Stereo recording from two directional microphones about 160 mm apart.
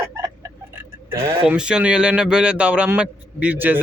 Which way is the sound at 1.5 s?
5° right (ahead or behind).